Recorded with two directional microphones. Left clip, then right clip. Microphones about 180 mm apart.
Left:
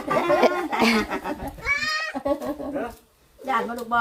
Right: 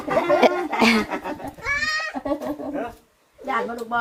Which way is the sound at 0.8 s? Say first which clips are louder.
Right 3 dB; 20° right (ahead or behind).